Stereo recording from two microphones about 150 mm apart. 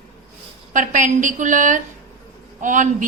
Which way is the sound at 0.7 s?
60° right (ahead or behind).